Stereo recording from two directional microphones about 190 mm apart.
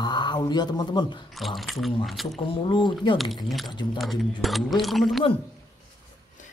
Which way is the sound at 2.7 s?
25° left (ahead or behind).